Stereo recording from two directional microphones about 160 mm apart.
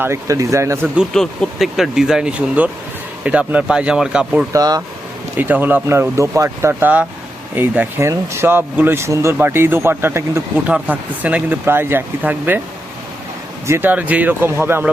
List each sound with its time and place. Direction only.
0.0 s speech: 20° right (ahead or behind)
0.9 s speech: 5° left (ahead or behind)
4.5 s speech: 25° right (ahead or behind)
5.4 s speech: 10° right (ahead or behind)
13.7 s speech: 15° right (ahead or behind)